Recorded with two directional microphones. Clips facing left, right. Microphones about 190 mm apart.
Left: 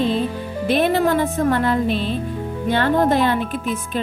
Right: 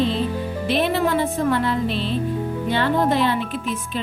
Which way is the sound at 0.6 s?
50° left (ahead or behind).